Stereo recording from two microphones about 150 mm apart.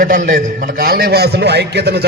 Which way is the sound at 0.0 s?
60° right (ahead or behind).